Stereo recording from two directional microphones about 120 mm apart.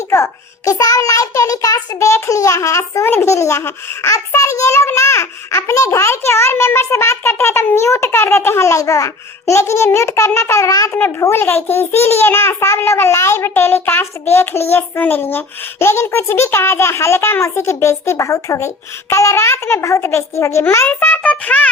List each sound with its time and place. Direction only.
0.1 s a child's voice: 25° left (ahead or behind)